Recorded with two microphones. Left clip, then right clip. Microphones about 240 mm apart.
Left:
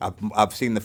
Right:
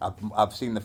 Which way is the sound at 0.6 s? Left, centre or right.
Left.